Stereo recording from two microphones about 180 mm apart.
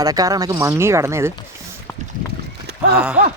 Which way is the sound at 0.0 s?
20° right (ahead or behind).